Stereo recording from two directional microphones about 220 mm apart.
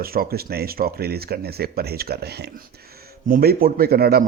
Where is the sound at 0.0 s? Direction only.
45° right (ahead or behind).